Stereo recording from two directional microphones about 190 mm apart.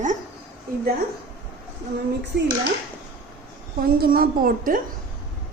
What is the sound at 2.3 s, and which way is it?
Speech, 60° right (ahead or behind).